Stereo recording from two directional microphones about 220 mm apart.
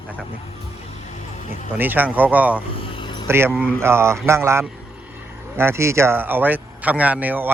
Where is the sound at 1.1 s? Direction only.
30° left (ahead or behind).